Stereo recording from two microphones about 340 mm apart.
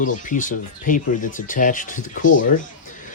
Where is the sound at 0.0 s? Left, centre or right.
Left.